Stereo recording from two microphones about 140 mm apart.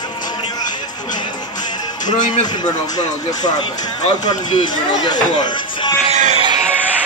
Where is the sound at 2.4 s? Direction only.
30° left (ahead or behind).